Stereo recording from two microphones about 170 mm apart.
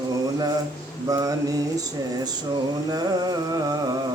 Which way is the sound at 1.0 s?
20° right (ahead or behind).